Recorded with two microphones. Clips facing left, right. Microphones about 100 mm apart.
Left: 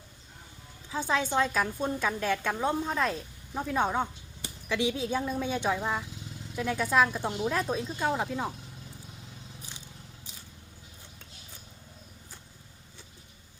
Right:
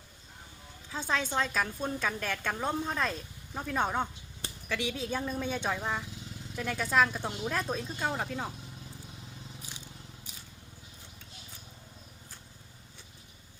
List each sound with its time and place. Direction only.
1.1 s a woman's voice: 15° left (ahead or behind)
7.4 s a woman's voice: 5° left (ahead or behind)